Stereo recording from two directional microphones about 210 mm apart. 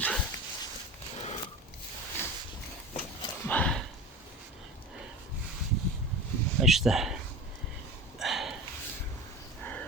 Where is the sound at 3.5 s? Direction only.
5° left (ahead or behind).